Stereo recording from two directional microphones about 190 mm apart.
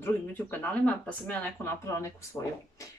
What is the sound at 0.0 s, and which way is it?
Speech, 10° left (ahead or behind).